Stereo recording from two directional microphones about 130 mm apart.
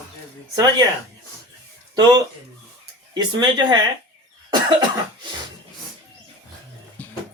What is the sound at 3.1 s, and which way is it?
Speech, 35° right (ahead or behind).